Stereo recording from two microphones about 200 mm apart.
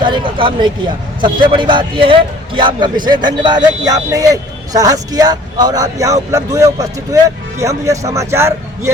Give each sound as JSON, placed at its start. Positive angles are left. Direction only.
{"t": 0.0, "sound": "a man's voice", "side_deg": -25}